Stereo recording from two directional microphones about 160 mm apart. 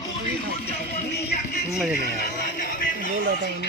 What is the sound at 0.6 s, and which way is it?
Music, 80° left.